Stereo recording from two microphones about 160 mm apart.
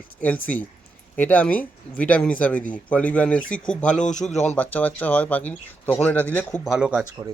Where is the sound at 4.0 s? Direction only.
50° left (ahead or behind).